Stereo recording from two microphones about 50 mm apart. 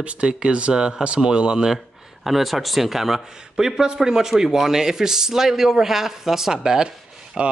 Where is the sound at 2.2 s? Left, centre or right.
Centre.